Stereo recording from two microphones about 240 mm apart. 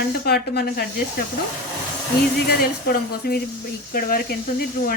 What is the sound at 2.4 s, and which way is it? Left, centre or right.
Speech, left.